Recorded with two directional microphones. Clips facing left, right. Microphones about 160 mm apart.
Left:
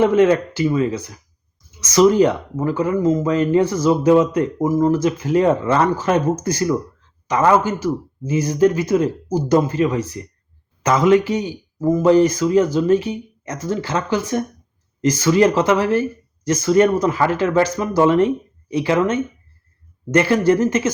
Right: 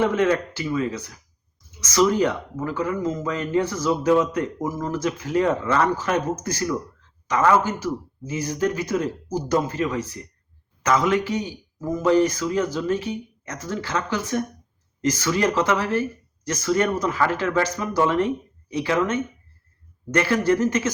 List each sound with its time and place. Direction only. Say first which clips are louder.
0.0 s speech: left 6 dB; 20° left (ahead or behind)